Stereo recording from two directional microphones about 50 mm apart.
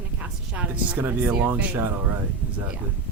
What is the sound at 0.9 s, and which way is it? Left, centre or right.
Speech, right.